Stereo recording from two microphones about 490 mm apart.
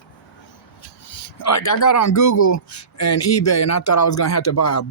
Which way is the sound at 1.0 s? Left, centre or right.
Left.